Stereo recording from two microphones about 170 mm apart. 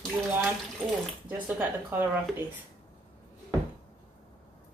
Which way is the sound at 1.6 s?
10° right (ahead or behind).